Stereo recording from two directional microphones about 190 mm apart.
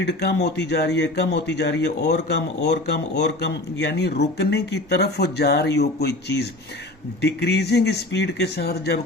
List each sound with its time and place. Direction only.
0.0 s speech: 60° left (ahead or behind)